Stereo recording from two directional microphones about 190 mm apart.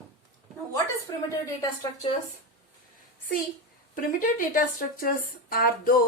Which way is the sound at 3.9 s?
45° left (ahead or behind).